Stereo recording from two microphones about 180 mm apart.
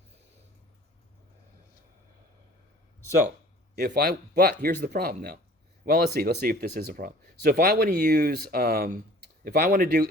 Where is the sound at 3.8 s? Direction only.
60° right (ahead or behind).